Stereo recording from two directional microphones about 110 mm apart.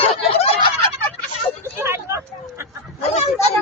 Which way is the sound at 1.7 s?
25° right (ahead or behind).